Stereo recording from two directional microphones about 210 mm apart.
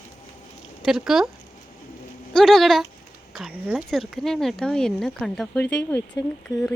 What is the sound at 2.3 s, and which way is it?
Speech, centre (ahead or behind).